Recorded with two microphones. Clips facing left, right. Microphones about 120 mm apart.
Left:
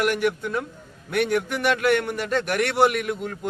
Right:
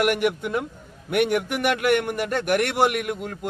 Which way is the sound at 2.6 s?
50° right (ahead or behind).